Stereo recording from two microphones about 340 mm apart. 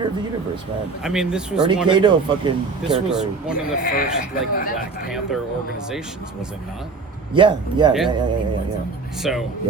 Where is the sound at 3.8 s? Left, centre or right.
Left.